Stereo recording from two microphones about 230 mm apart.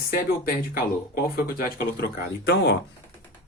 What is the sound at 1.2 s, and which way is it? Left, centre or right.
Speech, left.